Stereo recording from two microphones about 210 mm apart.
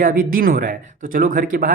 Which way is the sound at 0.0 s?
40° right (ahead or behind).